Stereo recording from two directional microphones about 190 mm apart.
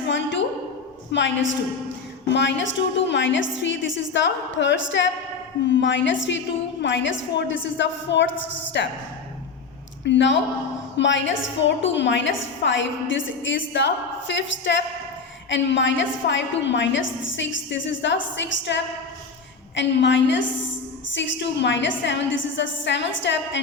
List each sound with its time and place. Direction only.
0.1 s a sound: 75° left (ahead or behind)
1.1 s a woman's voice: 75° left (ahead or behind)
10.1 s a woman's voice: 70° left (ahead or behind)